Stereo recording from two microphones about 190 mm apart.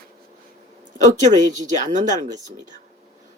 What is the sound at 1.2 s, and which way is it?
A woman's voice, 40° right (ahead or behind).